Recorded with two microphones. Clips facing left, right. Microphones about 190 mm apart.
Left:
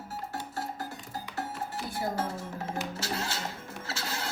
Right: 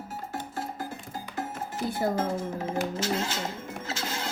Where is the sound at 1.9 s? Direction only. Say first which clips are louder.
Right 6 dB; 20° right (ahead or behind).